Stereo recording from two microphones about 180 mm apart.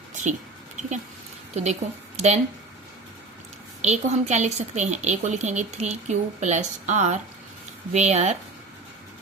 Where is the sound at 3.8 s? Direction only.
40° right (ahead or behind).